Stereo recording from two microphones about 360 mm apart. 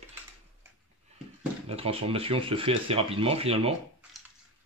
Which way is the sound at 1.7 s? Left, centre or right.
Centre.